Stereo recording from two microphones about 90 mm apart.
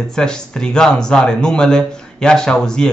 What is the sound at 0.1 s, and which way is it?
Speech, 10° left (ahead or behind).